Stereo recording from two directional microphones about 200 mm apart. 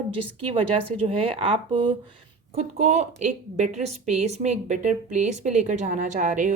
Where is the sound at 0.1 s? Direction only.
25° right (ahead or behind).